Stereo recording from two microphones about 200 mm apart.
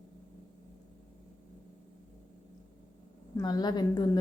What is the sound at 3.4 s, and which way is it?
Speech, 20° left (ahead or behind).